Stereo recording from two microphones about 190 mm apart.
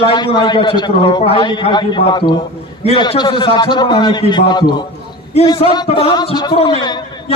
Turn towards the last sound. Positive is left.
turn(degrees=20)  # may be behind; listen again after turning